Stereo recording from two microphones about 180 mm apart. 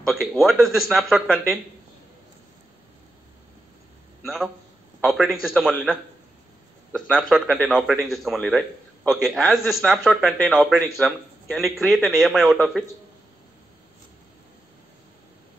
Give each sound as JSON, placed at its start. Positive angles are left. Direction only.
{"t": 0.1, "sound": "a man's voice", "side_deg": 0}
{"t": 5.0, "sound": "a man's voice", "side_deg": 0}
{"t": 7.2, "sound": "a man's voice", "side_deg": 5}